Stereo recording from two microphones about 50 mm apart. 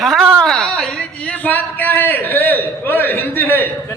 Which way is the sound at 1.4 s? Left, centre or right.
Left.